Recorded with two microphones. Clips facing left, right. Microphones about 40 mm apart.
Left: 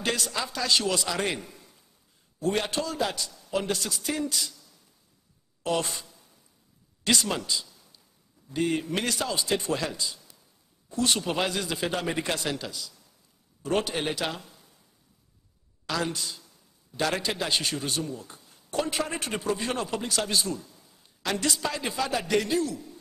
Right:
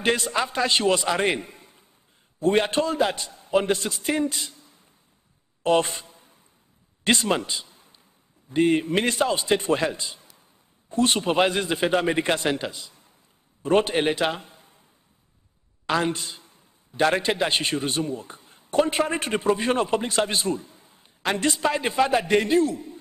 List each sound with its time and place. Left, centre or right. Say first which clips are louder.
0.0 s a man's voice: right 6 dB; right
5.6 s a sound: right 7 dB; right
7.1 s a man's voice: right 4 dB; right
15.9 s a man's voice: right 6 dB; right